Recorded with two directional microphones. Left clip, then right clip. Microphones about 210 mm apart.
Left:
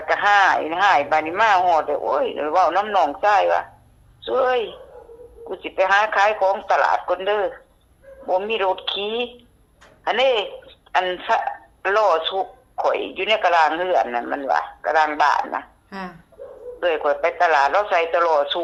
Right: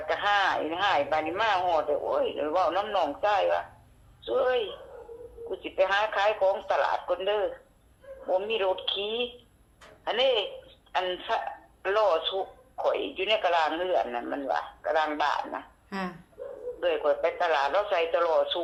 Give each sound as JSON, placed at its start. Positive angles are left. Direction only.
{"t": 0.0, "sound": "speech", "side_deg": 50}
{"t": 15.9, "sound": "speech", "side_deg": 0}
{"t": 16.8, "sound": "speech", "side_deg": 50}